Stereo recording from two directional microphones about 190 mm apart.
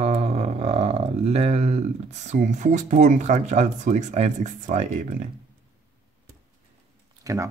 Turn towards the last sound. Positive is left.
turn(degrees=-15)  # may be behind; listen again after turning